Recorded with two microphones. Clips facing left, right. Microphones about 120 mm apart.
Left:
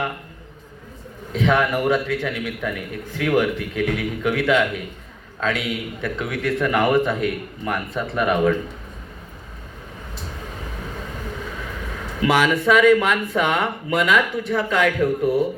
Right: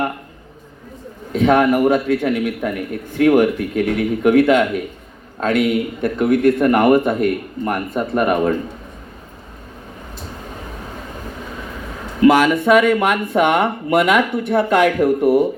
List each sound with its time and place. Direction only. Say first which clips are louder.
1.3 s a man's voice: right 6 dB; 50° right (ahead or behind)
12.2 s a man's voice: right 6 dB; 45° right (ahead or behind); by 15.4 s 65° right (ahead or behind)